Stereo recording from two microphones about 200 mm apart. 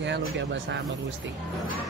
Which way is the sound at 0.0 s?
60° right (ahead or behind).